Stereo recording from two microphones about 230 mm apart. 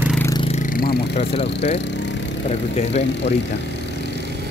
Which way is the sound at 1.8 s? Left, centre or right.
Left.